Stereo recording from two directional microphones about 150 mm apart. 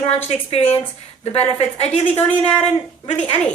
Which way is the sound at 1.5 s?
45° left (ahead or behind).